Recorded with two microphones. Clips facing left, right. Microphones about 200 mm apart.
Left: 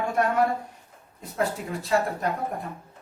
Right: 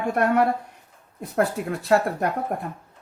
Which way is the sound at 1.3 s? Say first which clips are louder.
Right 4 dB; 60° right (ahead or behind).